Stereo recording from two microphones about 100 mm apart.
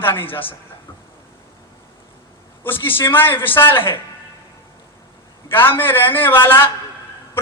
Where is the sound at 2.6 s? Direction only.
20° left (ahead or behind).